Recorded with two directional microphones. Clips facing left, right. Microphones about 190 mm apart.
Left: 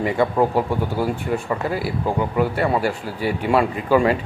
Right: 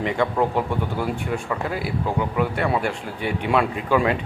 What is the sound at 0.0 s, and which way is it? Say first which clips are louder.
Speech: left 3 dB; 5° left (ahead or behind).